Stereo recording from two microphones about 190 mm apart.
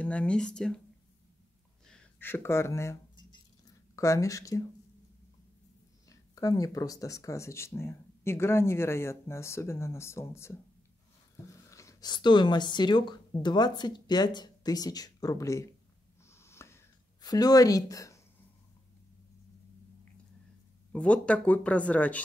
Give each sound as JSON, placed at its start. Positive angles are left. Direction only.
{"t": 0.0, "sound": "speech", "side_deg": 5}
{"t": 1.9, "sound": "a sound", "side_deg": 5}
{"t": 3.9, "sound": "speech", "side_deg": 15}
{"t": 6.0, "sound": "speech", "side_deg": 20}
{"t": 16.3, "sound": "a sound", "side_deg": 15}
{"t": 20.9, "sound": "speech", "side_deg": 5}